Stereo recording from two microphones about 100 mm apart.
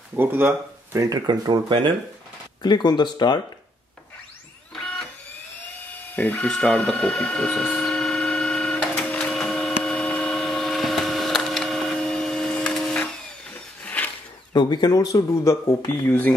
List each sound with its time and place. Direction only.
0.1 s speech: 20° right (ahead or behind)
0.9 s speech: 35° right (ahead or behind); by 1.9 s 50° right (ahead or behind)
2.6 s speech: 45° left (ahead or behind)
4.7 s printer: 5° left (ahead or behind)
6.1 s a sound: 15° left (ahead or behind)
14.5 s speech: 45° left (ahead or behind)
16.1 s speech: 20° left (ahead or behind)